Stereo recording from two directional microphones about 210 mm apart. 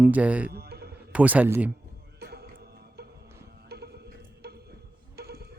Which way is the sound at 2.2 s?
50° right (ahead or behind).